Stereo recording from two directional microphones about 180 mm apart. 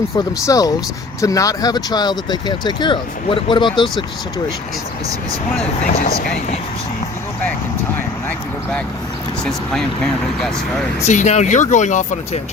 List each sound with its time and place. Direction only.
0.4 s speech: 20° left (ahead or behind)
9.4 s speech: 5° left (ahead or behind)
11.0 s speech: 40° left (ahead or behind)